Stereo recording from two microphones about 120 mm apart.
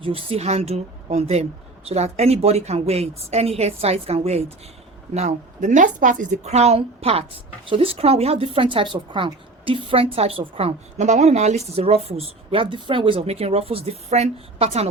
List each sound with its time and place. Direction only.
0.0 s a woman's voice: 50° right (ahead or behind)
5.1 s a woman's voice: 80° right
11.7 s a woman's voice: 55° right (ahead or behind)